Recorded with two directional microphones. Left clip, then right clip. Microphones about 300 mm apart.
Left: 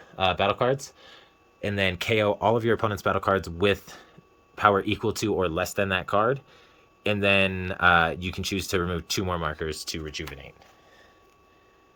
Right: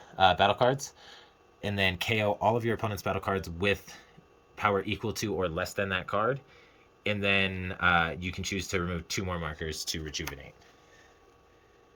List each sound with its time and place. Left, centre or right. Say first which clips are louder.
0.2 s speech: even; centre